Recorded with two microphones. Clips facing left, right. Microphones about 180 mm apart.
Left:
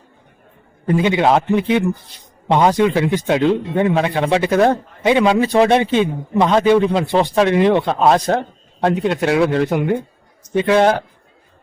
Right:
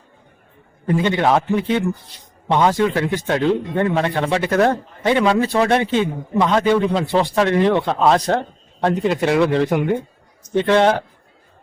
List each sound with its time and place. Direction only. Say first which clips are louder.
0.9 s speech: left 2 dB; 10° left (ahead or behind)